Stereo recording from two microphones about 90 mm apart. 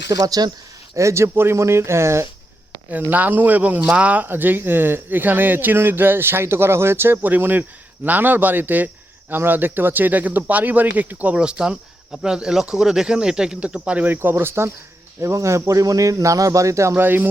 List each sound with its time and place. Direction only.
0.1 s speech: 45° right (ahead or behind)
0.9 s speech: 35° right (ahead or behind)
3.1 s speech: 20° right (ahead or behind)